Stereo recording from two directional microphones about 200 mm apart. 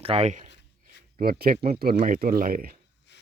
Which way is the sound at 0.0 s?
30° right (ahead or behind).